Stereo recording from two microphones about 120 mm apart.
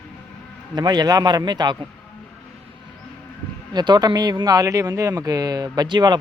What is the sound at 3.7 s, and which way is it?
Speech, 35° right (ahead or behind).